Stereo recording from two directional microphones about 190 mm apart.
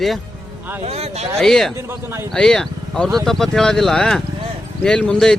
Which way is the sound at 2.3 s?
5° left (ahead or behind).